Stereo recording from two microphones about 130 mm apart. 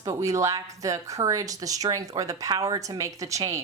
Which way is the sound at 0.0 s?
25° right (ahead or behind).